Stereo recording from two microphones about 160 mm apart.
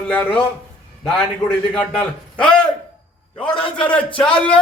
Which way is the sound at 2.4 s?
5° left (ahead or behind).